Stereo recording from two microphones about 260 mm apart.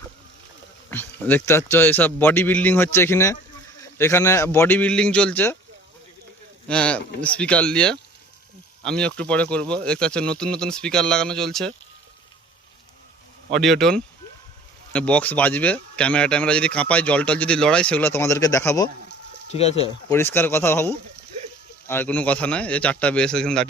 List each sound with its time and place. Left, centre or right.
0.9 s a man's voice: centre
6.7 s a man's voice: centre
13.5 s a man's voice: centre
19.5 s speech: left
20.1 s a man's voice: centre